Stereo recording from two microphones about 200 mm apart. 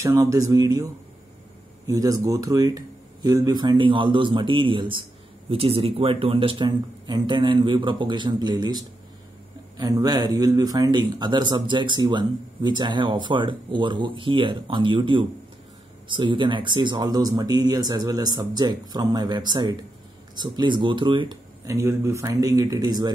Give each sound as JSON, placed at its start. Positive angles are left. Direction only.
{"t": 0.0, "sound": "speech", "side_deg": -15}
{"t": 1.9, "sound": "speech", "side_deg": -15}